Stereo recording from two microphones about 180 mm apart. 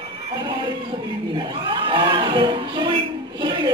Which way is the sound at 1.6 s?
25° right (ahead or behind).